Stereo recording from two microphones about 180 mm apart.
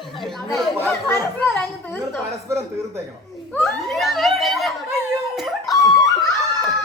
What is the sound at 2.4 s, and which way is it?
Speech, 15° right (ahead or behind).